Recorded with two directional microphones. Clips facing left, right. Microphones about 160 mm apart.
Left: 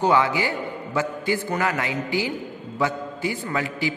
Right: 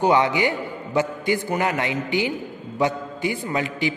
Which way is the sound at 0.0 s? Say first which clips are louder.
Right 2 dB; 20° right (ahead or behind).